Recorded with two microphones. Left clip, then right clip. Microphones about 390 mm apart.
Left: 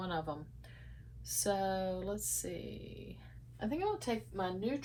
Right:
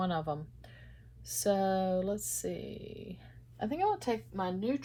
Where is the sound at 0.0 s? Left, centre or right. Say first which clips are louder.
Right 5 dB; right.